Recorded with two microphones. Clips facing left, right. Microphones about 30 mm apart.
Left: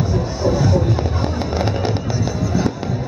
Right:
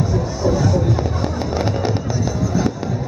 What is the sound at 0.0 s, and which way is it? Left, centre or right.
Fireworks, left.